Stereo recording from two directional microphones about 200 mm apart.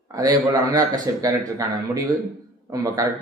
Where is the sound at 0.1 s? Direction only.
15° right (ahead or behind).